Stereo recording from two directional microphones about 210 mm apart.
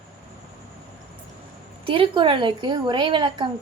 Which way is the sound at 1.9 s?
25° right (ahead or behind).